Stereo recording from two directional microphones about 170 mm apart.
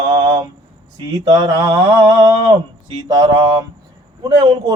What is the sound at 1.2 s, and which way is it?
Speech, 20° right (ahead or behind).